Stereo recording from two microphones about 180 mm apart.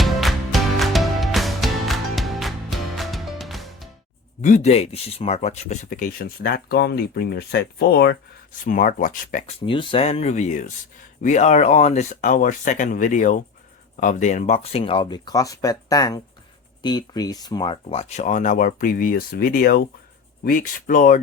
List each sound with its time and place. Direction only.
0.0 s music: centre (ahead or behind)
4.4 s speech: 45° left (ahead or behind); by 8.1 s 65° left (ahead or behind)
8.6 s speech: 45° left (ahead or behind)
9.5 s speech: 30° left (ahead or behind); by 21.2 s 45° left (ahead or behind)